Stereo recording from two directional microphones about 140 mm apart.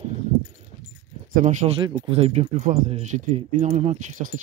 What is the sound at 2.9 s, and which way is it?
Speech, 50° right (ahead or behind).